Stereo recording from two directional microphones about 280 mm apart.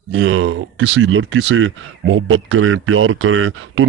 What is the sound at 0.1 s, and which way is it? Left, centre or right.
Speech, right.